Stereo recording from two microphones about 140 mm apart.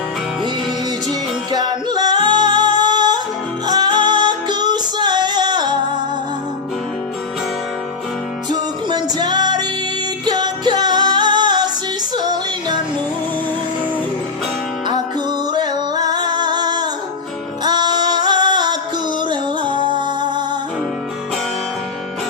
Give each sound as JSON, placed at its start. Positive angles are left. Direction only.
{"t": 1.5, "sound": "music", "side_deg": -30}
{"t": 8.4, "sound": "music", "side_deg": -30}
{"t": 15.5, "sound": "music", "side_deg": -30}